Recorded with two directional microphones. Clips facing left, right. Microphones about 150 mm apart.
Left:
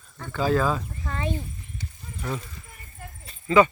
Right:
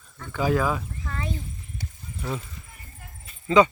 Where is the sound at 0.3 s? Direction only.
15° right (ahead or behind).